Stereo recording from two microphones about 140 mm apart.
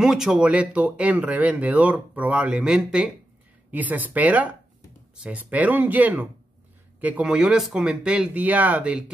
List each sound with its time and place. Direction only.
0.0 s speech: 5° right (ahead or behind)